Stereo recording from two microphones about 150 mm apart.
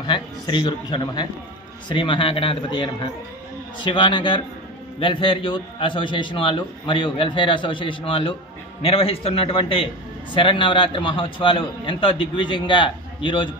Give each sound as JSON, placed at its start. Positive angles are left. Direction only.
{"t": 0.0, "sound": "a man's voice", "side_deg": 35}